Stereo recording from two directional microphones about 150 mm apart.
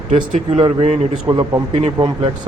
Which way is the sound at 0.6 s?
45° right (ahead or behind).